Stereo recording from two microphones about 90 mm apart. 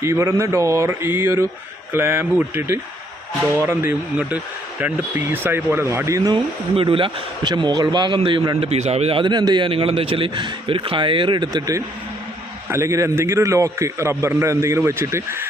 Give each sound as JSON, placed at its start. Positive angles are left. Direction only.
{"t": 0.0, "sound": "speech", "side_deg": -30}
{"t": 6.3, "sound": "speech", "side_deg": -65}
{"t": 7.5, "sound": "speech", "side_deg": -50}
{"t": 8.6, "sound": "a man's voice", "side_deg": -90}
{"t": 9.3, "sound": "speech", "side_deg": -55}
{"t": 9.6, "sound": "speech", "side_deg": -80}
{"t": 11.5, "sound": "a man's voice", "side_deg": -40}